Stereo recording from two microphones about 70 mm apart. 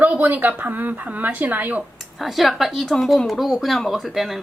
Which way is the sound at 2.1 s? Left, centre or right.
Centre.